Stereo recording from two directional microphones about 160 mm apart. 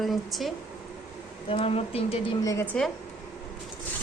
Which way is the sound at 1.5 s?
35° left (ahead or behind).